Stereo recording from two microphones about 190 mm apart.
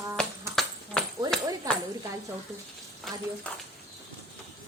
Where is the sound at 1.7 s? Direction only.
20° right (ahead or behind).